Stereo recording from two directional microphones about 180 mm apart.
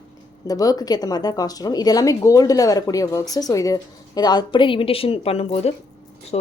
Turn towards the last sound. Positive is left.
turn(degrees=35)  # may be behind; listen again after turning